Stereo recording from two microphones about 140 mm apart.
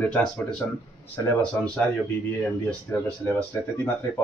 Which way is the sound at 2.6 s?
10° left (ahead or behind).